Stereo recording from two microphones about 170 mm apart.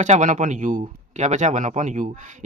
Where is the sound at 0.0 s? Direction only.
45° right (ahead or behind).